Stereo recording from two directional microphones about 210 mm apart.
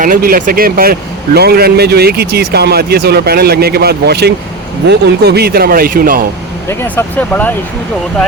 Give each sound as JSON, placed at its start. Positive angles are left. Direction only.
{"t": 0.0, "sound": "speech", "side_deg": -45}
{"t": 6.7, "sound": "speech", "side_deg": 10}